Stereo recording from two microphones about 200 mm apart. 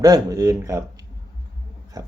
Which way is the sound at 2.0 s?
20° right (ahead or behind).